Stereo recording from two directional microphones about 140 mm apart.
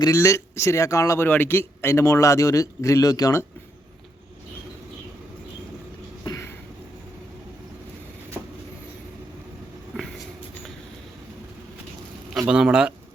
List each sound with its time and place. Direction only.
0.0 s a man's voice: 20° left (ahead or behind)
6.2 s a sound: 25° left (ahead or behind)
12.5 s speech: 5° right (ahead or behind)